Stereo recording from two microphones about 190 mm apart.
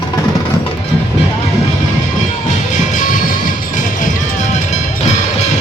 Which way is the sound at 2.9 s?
45° left (ahead or behind).